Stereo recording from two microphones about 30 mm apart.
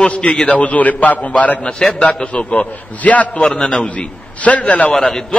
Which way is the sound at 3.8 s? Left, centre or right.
Left.